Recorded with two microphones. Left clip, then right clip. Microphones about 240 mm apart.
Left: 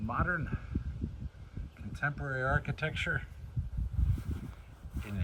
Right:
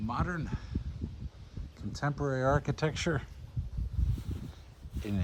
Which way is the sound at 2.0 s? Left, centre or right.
Right.